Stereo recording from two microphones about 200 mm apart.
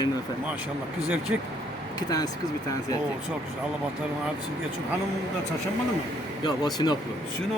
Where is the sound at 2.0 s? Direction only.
20° left (ahead or behind).